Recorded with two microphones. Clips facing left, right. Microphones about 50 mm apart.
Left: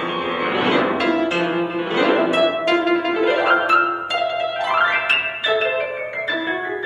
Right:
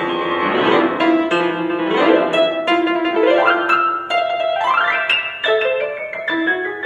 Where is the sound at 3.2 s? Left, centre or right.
Right.